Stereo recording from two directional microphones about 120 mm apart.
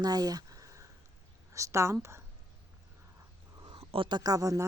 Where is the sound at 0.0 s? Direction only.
35° right (ahead or behind).